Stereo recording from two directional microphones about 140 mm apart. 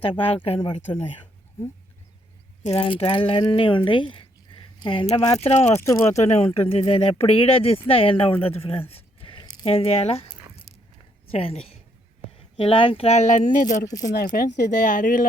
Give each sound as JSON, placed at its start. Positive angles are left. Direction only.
{"t": 0.6, "sound": "speech", "side_deg": 35}
{"t": 2.6, "sound": "speech", "side_deg": 45}
{"t": 5.7, "sound": "speech", "side_deg": 20}
{"t": 6.1, "sound": "speech", "side_deg": 50}
{"t": 8.9, "sound": "a sound", "side_deg": 45}
{"t": 9.6, "sound": "a woman's voice", "side_deg": 45}
{"t": 13.8, "sound": "speech", "side_deg": 25}
{"t": 14.3, "sound": "speech", "side_deg": 70}